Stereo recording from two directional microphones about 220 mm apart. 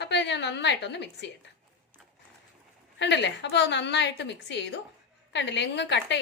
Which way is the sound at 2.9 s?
50° left (ahead or behind).